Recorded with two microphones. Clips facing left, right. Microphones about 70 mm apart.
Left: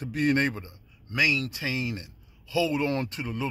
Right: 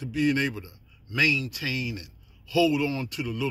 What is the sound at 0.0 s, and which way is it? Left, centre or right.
Speech, left.